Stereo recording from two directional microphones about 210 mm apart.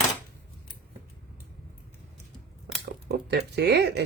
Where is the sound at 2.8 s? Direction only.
50° right (ahead or behind).